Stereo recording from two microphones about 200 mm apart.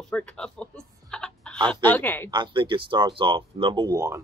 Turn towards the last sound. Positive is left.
turn(degrees=-15)  # may be behind; listen again after turning